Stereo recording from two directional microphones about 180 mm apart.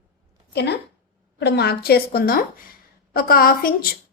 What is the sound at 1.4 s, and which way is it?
A woman's voice, 65° left (ahead or behind).